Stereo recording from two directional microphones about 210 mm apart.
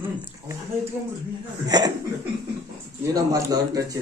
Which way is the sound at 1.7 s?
20° right (ahead or behind).